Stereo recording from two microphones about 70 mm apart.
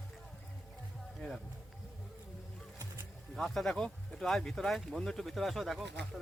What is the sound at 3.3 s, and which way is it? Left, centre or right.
Speech, centre.